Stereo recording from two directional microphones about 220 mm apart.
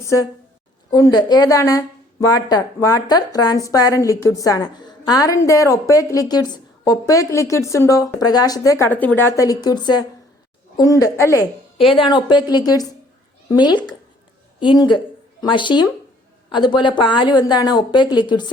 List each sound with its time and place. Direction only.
0.9 s a woman's voice: 15° left (ahead or behind)